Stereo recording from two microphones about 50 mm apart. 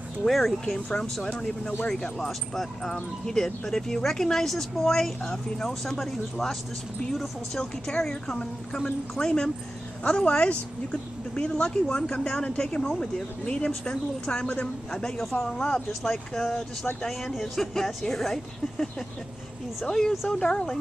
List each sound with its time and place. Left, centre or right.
0.3 s speech: centre
0.7 s speech: centre